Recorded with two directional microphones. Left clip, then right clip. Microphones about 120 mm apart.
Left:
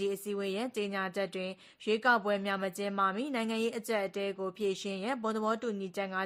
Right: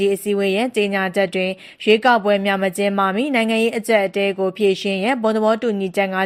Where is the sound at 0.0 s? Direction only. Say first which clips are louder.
Right 16 dB; 20° right (ahead or behind).